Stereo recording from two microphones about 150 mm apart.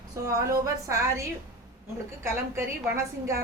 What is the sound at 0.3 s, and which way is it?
A woman's voice, 20° right (ahead or behind).